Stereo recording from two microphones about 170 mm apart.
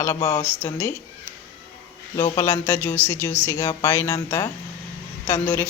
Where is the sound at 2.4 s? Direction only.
10° left (ahead or behind).